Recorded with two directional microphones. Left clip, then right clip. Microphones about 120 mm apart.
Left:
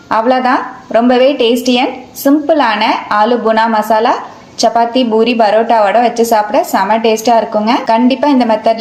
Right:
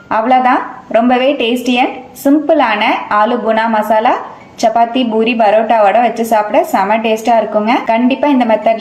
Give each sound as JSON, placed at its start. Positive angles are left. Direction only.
{"t": 0.1, "sound": "a woman's voice", "side_deg": 35}